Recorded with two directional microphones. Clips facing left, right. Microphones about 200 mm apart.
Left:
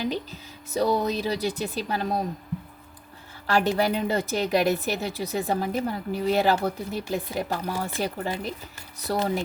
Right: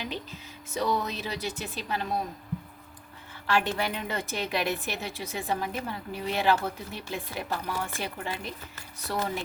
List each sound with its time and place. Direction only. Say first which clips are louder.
0.0 s speech: left 7 dB; 40° left (ahead or behind)
3.4 s a woman's voice: left 5 dB; 40° left (ahead or behind)